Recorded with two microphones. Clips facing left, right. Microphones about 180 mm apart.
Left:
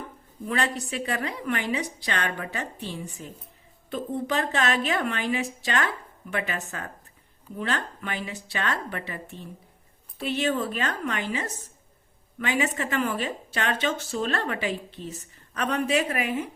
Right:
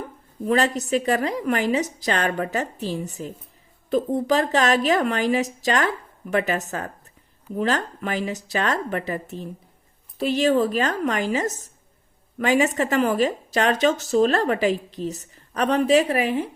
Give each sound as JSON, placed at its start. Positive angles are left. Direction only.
{"t": 0.4, "sound": "speech", "side_deg": -40}